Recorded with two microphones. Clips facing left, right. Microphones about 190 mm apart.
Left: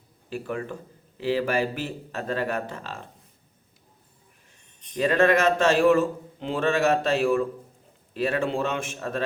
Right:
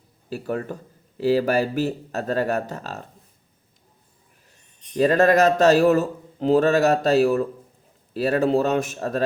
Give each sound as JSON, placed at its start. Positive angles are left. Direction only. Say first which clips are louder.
{"t": 0.3, "sound": "a man's voice", "louder": "right 4 dB", "side_deg": -40}
{"t": 4.9, "sound": "a man's voice", "louder": "right 4 dB", "side_deg": -40}